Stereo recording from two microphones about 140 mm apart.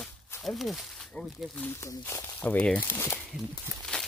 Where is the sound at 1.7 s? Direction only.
20° left (ahead or behind).